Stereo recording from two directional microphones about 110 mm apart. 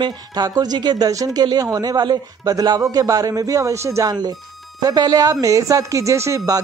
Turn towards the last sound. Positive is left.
turn(degrees=-30)  # may be behind; listen again after turning